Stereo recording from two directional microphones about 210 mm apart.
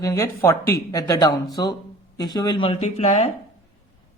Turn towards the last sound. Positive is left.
turn(degrees=30)  # may be behind; listen again after turning